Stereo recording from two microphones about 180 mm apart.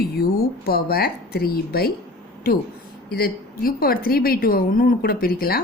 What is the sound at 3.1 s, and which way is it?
A woman's voice, 55° left (ahead or behind).